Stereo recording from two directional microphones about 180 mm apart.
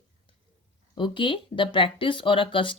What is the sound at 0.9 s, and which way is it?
Speech, 25° left (ahead or behind).